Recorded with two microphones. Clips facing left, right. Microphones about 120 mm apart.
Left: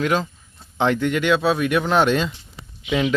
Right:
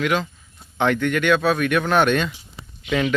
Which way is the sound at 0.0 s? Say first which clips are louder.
Left 1 dB; 35° left (ahead or behind).